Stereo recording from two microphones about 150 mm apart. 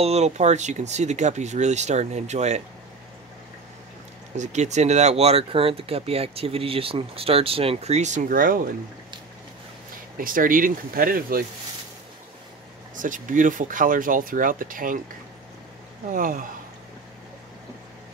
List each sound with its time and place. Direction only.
0.0 s speech: 45° right (ahead or behind)
4.4 s speech: 50° right (ahead or behind); by 8.7 s 70° right (ahead or behind)
10.1 s speech: 65° right (ahead or behind)
12.9 s speech: 60° right (ahead or behind)
16.1 s speech: 65° right (ahead or behind)